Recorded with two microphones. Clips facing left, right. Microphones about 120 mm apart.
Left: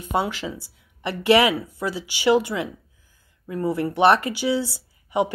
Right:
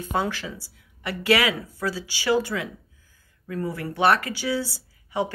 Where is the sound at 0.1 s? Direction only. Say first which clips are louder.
Left 3 dB; 20° left (ahead or behind).